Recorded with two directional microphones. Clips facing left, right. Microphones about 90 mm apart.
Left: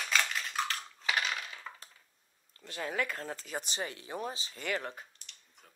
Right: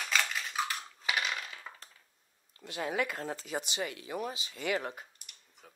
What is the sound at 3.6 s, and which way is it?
Speech, 35° left (ahead or behind).